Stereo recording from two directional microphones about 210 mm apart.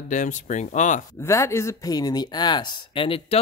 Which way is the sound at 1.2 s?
15° left (ahead or behind).